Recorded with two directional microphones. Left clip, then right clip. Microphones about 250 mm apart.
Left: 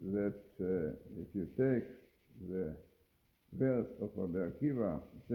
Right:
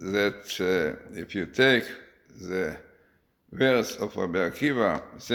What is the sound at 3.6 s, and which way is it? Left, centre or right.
A man's voice, centre.